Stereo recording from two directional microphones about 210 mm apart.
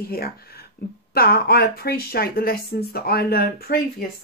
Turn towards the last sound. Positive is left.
turn(degrees=45)  # may be behind; listen again after turning